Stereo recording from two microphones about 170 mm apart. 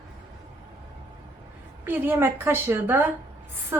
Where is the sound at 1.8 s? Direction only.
15° right (ahead or behind).